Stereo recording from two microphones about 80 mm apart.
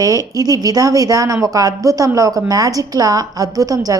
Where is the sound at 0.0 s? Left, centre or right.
Right.